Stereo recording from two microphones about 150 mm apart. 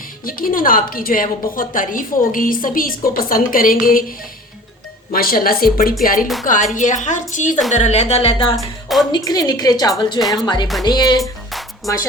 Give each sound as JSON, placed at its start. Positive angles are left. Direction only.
{"t": 0.3, "sound": "a woman's voice", "side_deg": 70}
{"t": 5.1, "sound": "speech", "side_deg": 75}
{"t": 6.0, "sound": "a woman's voice", "side_deg": 70}
{"t": 8.5, "sound": "a woman's voice", "side_deg": 0}
{"t": 9.1, "sound": "a woman's voice", "side_deg": 25}